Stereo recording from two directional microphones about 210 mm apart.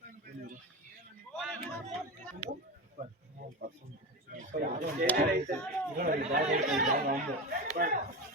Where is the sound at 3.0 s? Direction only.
30° right (ahead or behind).